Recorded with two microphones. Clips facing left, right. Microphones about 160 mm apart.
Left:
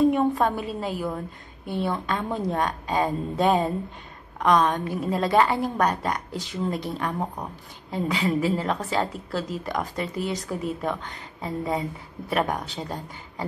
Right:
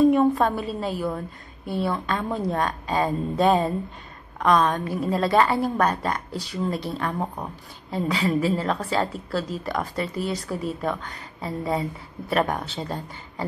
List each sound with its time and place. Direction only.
0.1 s a woman's voice: 15° left (ahead or behind)